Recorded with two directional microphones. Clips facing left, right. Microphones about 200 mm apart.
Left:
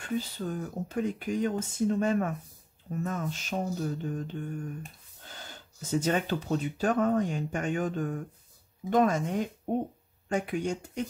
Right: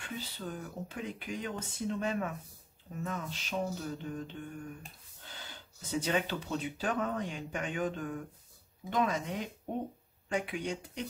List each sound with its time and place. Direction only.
0.0 s speech: 45° left (ahead or behind)